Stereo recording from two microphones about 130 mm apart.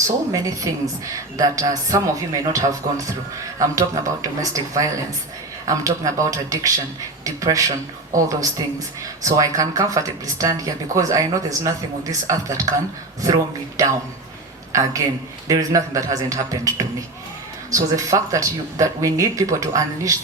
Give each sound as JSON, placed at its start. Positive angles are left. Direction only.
{"t": 0.3, "sound": "speech", "side_deg": -25}
{"t": 13.8, "sound": "a man's voice", "side_deg": -25}